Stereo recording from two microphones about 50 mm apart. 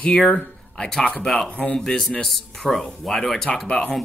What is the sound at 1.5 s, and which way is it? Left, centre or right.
Speech, left.